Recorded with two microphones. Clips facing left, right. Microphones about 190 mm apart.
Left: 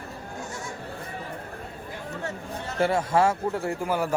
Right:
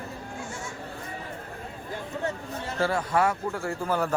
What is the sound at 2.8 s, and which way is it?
Speech, 25° left (ahead or behind).